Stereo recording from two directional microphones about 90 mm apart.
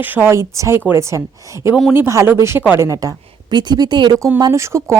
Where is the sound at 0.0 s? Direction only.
20° right (ahead or behind).